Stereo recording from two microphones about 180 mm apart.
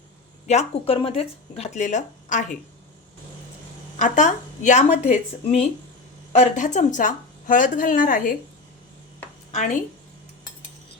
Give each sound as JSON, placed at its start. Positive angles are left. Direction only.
{"t": 0.4, "sound": "speech", "side_deg": 35}
{"t": 3.9, "sound": "a woman's voice", "side_deg": 45}
{"t": 9.5, "sound": "a woman's voice", "side_deg": 40}